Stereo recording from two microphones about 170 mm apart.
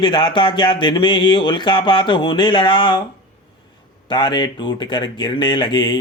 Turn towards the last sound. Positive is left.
turn(degrees=25)  # may be behind; listen again after turning